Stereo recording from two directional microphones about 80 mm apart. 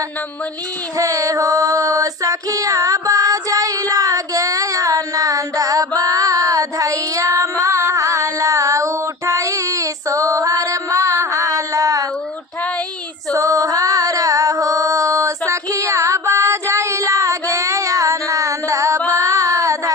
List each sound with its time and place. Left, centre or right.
0.9 s child singing: right
13.3 s female singing: right
19.1 s child singing: right